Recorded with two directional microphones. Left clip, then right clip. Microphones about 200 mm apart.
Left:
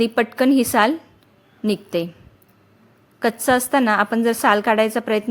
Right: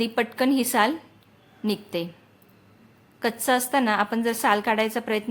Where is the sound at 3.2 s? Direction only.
25° left (ahead or behind).